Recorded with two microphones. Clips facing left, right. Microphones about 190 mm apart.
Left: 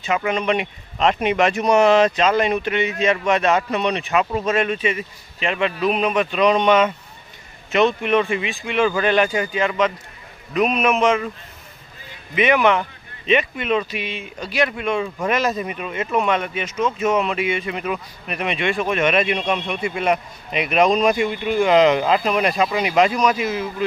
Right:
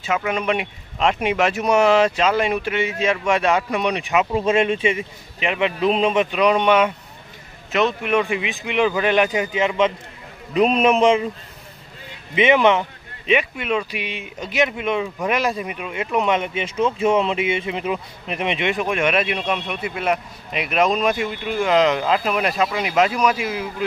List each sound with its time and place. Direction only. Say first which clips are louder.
0.0 s speech: left 1 dB; 5° right (ahead or behind); by 6.2 s 25° right (ahead or behind)
6.3 s a man's voice: left 3 dB; 10° right (ahead or behind); by 11.2 s 30° right (ahead or behind)
12.4 s speech: right 1 dB; 25° right (ahead or behind)
13.3 s speech: left 1 dB; 10° right (ahead or behind)